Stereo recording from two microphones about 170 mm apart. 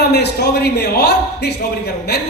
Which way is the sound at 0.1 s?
70° left (ahead or behind).